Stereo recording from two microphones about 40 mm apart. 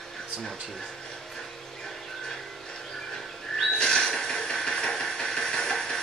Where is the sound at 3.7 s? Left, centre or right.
Left.